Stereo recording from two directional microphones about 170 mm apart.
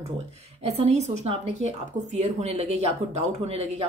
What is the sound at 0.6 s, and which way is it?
Speech, 40° right (ahead or behind).